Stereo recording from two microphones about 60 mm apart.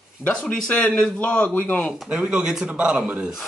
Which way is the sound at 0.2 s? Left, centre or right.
Centre.